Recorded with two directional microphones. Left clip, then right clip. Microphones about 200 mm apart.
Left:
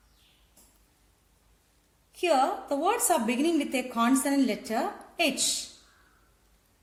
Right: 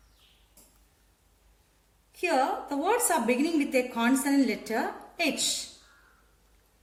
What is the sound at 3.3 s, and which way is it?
A woman's voice, 50° left (ahead or behind).